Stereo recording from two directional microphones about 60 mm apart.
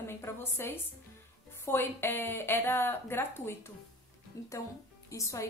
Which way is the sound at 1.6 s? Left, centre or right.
Left.